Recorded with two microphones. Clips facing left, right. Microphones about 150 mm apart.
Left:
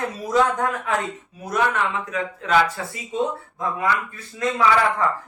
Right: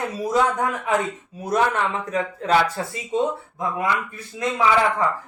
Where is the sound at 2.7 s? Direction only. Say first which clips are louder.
Right 2 dB; centre (ahead or behind).